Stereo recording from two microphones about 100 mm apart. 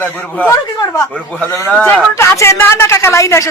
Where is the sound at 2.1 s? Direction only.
25° left (ahead or behind).